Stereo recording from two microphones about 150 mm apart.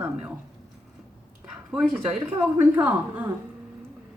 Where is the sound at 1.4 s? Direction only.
5° right (ahead or behind).